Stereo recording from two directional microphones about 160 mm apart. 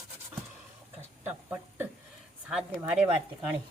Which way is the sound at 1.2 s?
10° right (ahead or behind).